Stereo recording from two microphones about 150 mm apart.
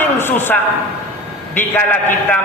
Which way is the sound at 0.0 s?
15° left (ahead or behind).